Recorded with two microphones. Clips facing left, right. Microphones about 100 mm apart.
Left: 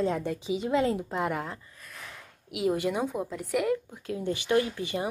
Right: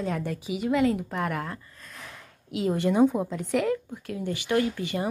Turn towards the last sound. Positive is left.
turn(degrees=20)  # may be behind; listen again after turning